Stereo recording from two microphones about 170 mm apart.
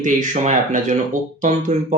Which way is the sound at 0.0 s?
50° right (ahead or behind).